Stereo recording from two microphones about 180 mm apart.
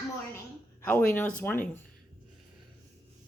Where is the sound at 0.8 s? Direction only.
10° left (ahead or behind).